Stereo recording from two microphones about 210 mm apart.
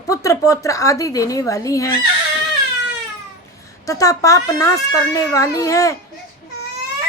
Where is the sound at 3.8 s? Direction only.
15° left (ahead or behind).